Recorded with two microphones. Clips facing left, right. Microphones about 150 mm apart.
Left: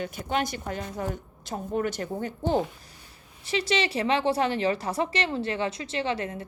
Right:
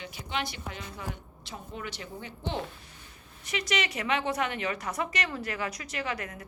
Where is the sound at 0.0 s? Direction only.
50° left (ahead or behind).